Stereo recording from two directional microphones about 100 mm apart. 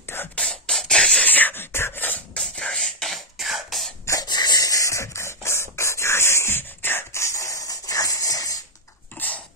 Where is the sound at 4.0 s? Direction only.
30° left (ahead or behind).